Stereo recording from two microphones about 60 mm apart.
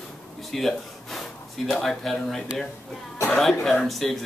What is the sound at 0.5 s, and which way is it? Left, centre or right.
Speech, centre.